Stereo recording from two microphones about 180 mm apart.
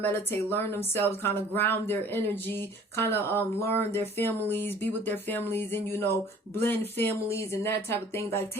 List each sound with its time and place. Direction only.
0.1 s speech: 10° left (ahead or behind)